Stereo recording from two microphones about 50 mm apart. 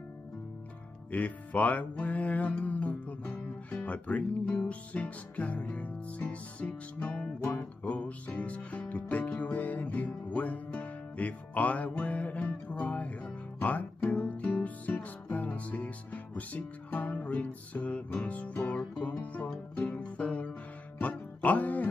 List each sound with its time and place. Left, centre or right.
1.1 s music: left